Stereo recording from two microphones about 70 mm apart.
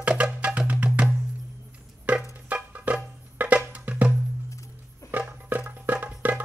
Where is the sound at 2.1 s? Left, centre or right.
Right.